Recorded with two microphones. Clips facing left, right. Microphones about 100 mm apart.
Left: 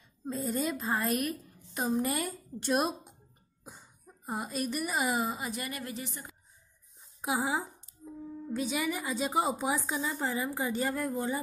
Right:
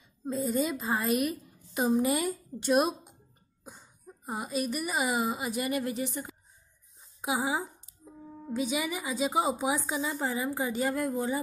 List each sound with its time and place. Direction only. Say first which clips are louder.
0.2 s a woman's voice: right 3 dB; centre (ahead or behind)
5.7 s a woman's voice: right 8 dB; 20° right (ahead or behind)
7.2 s a sound: right 1 dB; 5° right (ahead or behind)
8.5 s a woman's voice: right 1 dB; 5° right (ahead or behind)